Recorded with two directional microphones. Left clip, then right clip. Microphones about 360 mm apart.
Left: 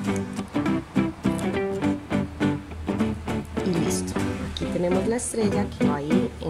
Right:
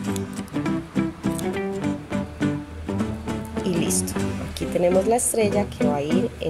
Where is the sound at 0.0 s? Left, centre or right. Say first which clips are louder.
Left 1 dB; centre.